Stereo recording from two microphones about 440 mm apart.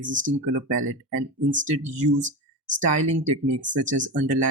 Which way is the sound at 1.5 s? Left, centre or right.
Centre.